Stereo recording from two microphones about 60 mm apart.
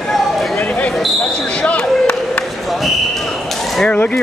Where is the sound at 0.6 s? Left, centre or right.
Left.